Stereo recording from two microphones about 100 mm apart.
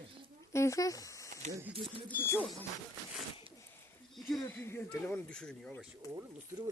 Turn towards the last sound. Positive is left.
turn(degrees=10)  # may be behind; listen again after turning